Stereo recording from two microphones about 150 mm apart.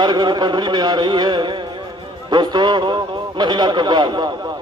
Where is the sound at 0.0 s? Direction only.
30° right (ahead or behind).